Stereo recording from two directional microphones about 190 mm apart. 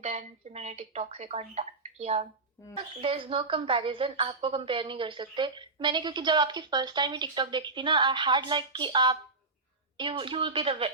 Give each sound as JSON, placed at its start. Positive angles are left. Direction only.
{"t": 0.0, "sound": "speech", "side_deg": -35}
{"t": 2.6, "sound": "speech", "side_deg": 15}
{"t": 3.0, "sound": "a woman's voice", "side_deg": -30}